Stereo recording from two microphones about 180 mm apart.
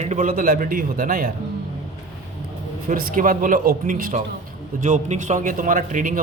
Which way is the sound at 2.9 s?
50° right (ahead or behind).